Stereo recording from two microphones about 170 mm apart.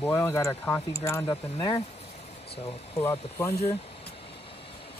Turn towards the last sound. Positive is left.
turn(degrees=15)  # may be behind; listen again after turning